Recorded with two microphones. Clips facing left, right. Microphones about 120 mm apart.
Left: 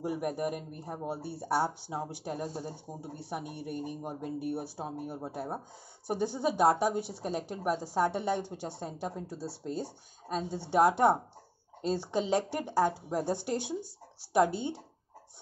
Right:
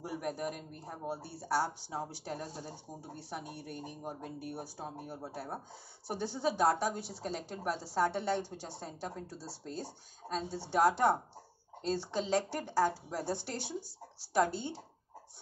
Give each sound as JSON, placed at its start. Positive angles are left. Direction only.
{"t": 0.0, "sound": "speech", "side_deg": 15}
{"t": 1.9, "sound": "speech", "side_deg": 10}
{"t": 12.1, "sound": "speech", "side_deg": 15}
{"t": 13.6, "sound": "speech", "side_deg": 50}